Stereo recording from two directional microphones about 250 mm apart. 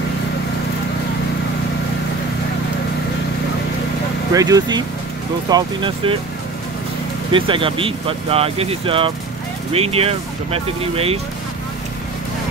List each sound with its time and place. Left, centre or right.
4.3 s speech: centre
7.3 s speech: centre